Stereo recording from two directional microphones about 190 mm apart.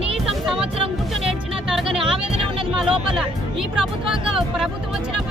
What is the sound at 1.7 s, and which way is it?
Music, centre (ahead or behind).